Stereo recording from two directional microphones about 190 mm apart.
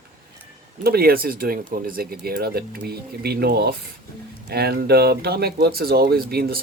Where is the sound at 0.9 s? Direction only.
55° right (ahead or behind).